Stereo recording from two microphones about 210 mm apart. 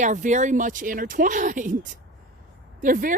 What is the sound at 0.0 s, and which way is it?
Speech, 35° right (ahead or behind).